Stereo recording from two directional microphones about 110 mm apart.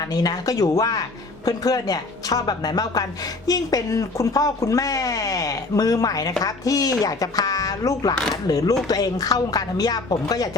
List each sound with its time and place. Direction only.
0.1 s speech: 35° left (ahead or behind)